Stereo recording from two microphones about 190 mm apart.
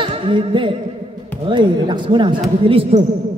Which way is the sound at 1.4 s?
25° right (ahead or behind).